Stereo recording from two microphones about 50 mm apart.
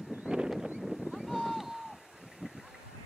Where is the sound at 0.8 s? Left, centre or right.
Centre.